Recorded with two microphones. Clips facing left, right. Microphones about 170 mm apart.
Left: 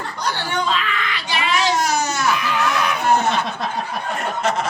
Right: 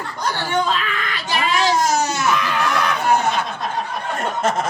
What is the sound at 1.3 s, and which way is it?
Baby cry, 40° right (ahead or behind).